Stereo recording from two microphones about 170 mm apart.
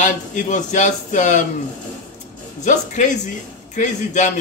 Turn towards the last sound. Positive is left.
turn(degrees=45)  # may be behind; listen again after turning